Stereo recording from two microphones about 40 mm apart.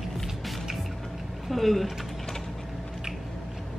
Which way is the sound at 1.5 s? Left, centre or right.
Centre.